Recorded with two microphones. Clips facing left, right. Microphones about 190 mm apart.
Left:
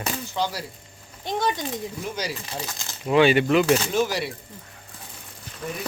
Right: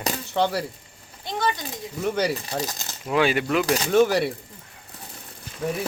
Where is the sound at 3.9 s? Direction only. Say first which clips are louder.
Right 6 dB; 60° right (ahead or behind).